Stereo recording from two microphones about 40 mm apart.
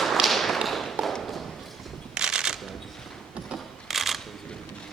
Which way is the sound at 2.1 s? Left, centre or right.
Centre.